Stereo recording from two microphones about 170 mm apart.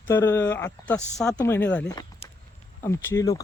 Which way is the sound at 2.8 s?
15° left (ahead or behind).